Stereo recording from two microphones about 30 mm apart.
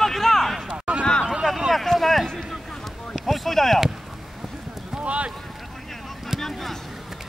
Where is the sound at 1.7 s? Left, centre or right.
Centre.